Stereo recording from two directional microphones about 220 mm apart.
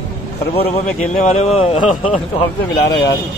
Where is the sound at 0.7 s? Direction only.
30° left (ahead or behind).